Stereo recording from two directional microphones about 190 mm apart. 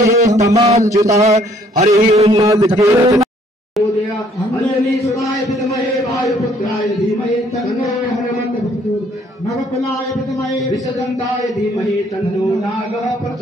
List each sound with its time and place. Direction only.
0.0 s mantra: 15° right (ahead or behind)
0.6 s a man's voice: 35° right (ahead or behind)
0.8 s speech: 15° right (ahead or behind)
1.2 s a man's voice: 35° right (ahead or behind)
2.4 s speech: 20° right (ahead or behind)
4.6 s a sound: 15° left (ahead or behind)